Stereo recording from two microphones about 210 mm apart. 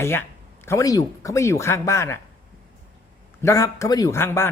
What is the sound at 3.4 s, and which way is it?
Speech, 15° left (ahead or behind).